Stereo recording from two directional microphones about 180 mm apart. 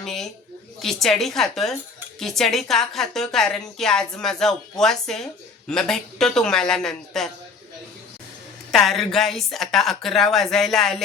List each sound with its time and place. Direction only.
0.0 s a woman's voice: centre (ahead or behind)
8.7 s a woman's voice: centre (ahead or behind)